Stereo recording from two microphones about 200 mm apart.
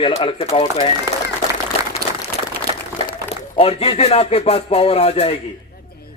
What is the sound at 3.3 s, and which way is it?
A man's voice, 30° left (ahead or behind).